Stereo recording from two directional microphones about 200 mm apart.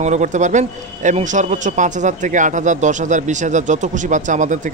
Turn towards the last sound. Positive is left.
turn(degrees=-40)  # may be behind; listen again after turning